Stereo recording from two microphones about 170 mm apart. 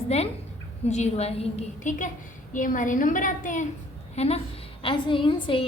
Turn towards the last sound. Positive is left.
turn(degrees=30)  # may be behind; listen again after turning